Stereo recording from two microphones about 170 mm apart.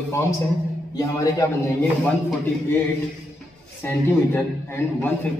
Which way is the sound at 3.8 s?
15° left (ahead or behind).